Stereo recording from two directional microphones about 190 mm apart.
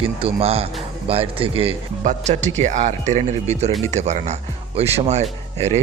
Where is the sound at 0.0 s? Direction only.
30° right (ahead or behind).